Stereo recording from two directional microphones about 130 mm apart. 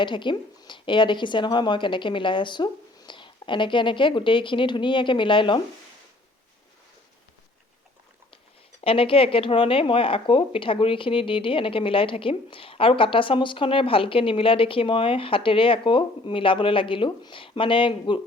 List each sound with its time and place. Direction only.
0.0 s a woman's voice: 40° left (ahead or behind)
8.8 s speech: 45° left (ahead or behind)